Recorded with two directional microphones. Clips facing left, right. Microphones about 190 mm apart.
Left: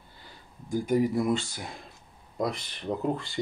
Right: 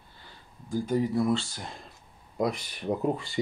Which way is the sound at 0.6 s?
15° left (ahead or behind).